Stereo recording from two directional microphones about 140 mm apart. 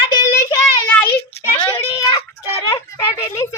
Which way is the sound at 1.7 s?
40° left (ahead or behind).